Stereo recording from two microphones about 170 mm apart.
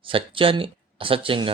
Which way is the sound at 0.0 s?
30° right (ahead or behind).